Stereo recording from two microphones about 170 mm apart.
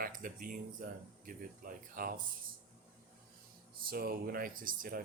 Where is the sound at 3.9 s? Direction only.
60° right (ahead or behind).